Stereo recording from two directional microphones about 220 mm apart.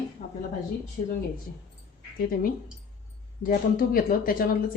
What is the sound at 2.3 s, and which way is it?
Speech, 40° left (ahead or behind).